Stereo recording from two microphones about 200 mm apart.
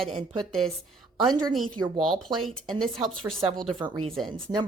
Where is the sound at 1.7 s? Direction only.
20° right (ahead or behind).